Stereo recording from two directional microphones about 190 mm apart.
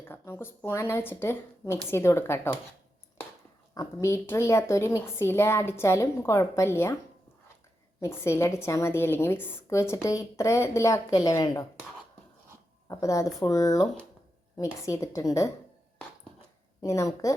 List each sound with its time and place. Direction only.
0.0 s a woman's voice: 15° left (ahead or behind)
3.8 s a woman's voice: 15° left (ahead or behind)
8.0 s a woman's voice: 15° left (ahead or behind)
12.9 s a woman's voice: 15° left (ahead or behind)
16.8 s a woman's voice: 15° left (ahead or behind)